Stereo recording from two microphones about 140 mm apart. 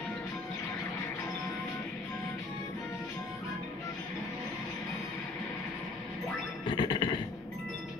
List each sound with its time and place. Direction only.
6.6 s music: 30° left (ahead or behind)